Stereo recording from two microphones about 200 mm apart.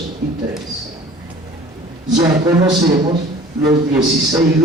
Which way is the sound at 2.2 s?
20° right (ahead or behind).